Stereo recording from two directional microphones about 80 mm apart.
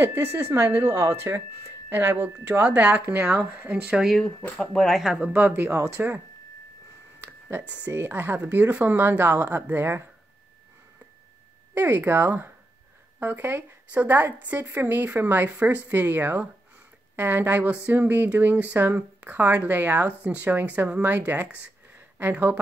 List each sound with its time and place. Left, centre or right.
0.0 s a woman's voice: right; by 4.1 s centre
4.7 s speech: centre
5.2 s a woman's voice: right
7.2 s a sound: right
7.9 s a woman's voice: right
11.7 s a woman's voice: right